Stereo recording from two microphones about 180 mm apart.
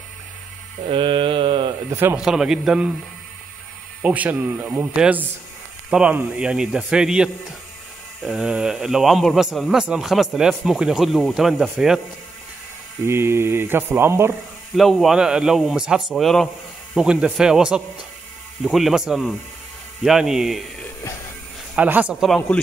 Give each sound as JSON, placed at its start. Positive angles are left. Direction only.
{"t": 0.8, "sound": "mantra", "side_deg": -30}
{"t": 1.9, "sound": "a man's voice", "side_deg": -15}
{"t": 4.0, "sound": "a man's voice", "side_deg": -10}
{"t": 13.0, "sound": "speech", "side_deg": -15}
{"t": 14.8, "sound": "a man's voice", "side_deg": 0}
{"t": 21.7, "sound": "a man's voice", "side_deg": -10}